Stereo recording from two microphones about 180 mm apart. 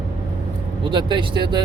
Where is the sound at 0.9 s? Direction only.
25° right (ahead or behind).